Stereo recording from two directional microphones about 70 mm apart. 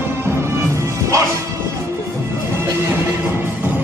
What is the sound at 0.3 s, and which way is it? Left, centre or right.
Music, right.